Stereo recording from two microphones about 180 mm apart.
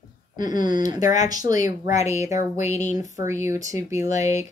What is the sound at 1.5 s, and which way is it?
Speech, 45° left (ahead or behind).